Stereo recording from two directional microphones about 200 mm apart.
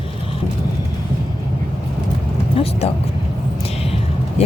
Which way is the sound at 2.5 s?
30° left (ahead or behind).